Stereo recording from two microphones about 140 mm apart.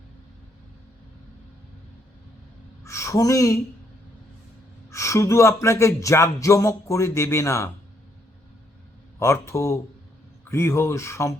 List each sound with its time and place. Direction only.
2.8 s speech: 20° left (ahead or behind)
4.9 s speech: 20° left (ahead or behind)
9.1 s speech: 20° left (ahead or behind)